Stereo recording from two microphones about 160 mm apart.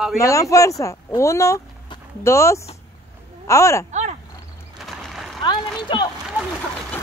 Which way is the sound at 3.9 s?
45° right (ahead or behind).